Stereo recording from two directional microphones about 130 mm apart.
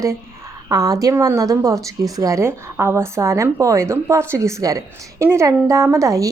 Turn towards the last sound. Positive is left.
turn(degrees=-25)  # may be behind; listen again after turning